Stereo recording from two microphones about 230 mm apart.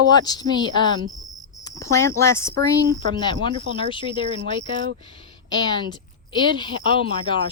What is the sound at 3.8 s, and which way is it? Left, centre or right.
Speech, left.